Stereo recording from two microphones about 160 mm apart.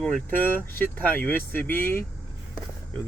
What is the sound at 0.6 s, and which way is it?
Speech, 10° left (ahead or behind).